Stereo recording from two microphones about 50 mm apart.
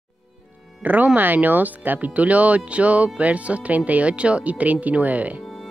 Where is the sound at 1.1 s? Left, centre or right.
Right.